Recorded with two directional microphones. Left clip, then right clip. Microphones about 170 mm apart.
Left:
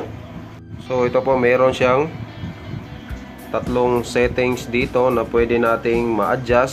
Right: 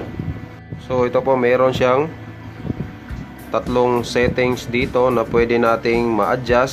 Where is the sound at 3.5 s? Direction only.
20° right (ahead or behind).